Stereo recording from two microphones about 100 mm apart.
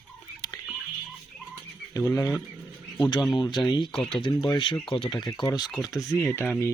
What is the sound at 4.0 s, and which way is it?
Speech, 5° left (ahead or behind).